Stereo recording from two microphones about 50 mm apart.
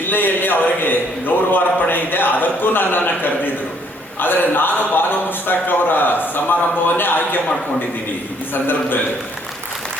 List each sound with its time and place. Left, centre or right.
0.0 s a sound: left
4.2 s a man's voice: left
8.5 s a man's voice: left